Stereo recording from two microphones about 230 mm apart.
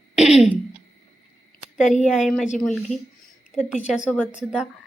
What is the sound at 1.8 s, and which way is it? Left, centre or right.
Speech, left.